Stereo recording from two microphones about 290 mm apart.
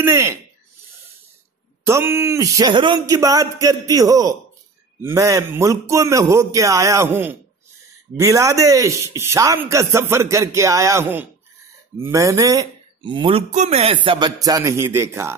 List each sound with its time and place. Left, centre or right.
0.0 s a man's voice: centre
1.9 s a man's voice: centre